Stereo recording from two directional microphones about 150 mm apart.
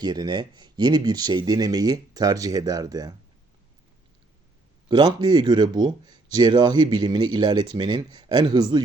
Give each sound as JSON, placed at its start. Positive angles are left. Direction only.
{"t": 0.0, "sound": "speech", "side_deg": -30}
{"t": 4.9, "sound": "speech", "side_deg": -30}